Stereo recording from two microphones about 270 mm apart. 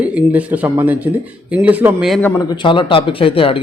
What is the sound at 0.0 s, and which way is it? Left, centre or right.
Speech, centre.